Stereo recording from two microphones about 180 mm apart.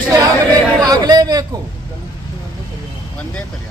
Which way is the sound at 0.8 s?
20° right (ahead or behind).